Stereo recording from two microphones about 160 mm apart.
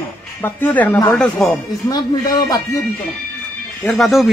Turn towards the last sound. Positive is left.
turn(degrees=0)  # may be behind; listen again after turning